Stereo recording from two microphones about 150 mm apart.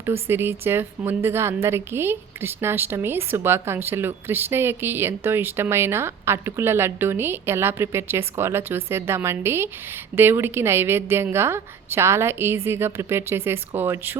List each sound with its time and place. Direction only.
0.0 s speech: 15° right (ahead or behind)